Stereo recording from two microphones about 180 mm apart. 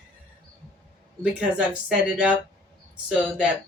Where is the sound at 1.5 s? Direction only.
5° right (ahead or behind).